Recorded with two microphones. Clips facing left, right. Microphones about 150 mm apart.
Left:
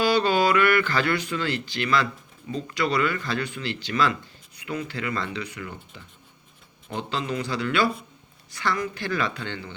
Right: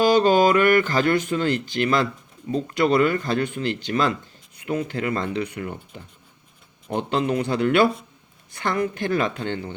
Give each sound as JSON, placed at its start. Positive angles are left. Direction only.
{"t": 0.0, "sound": "speech", "side_deg": -45}